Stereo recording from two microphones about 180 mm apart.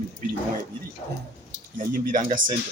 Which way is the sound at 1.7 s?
50° right (ahead or behind).